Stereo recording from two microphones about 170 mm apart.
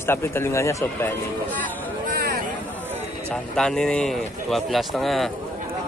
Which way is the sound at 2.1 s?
60° right (ahead or behind).